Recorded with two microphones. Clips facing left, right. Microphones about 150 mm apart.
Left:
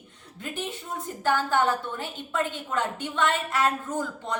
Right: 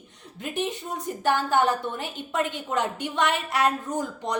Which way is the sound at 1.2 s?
15° right (ahead or behind).